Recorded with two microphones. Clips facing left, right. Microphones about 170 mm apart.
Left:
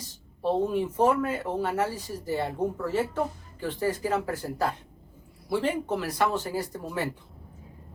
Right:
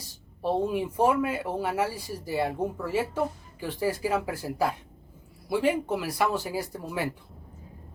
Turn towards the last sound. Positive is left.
turn(degrees=-10)  # may be behind; listen again after turning